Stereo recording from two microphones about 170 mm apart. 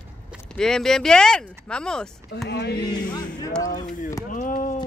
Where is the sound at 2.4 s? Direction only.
75° left (ahead or behind).